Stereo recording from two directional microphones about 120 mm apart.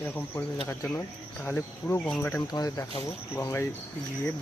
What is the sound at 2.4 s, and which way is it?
Speech, 30° left (ahead or behind).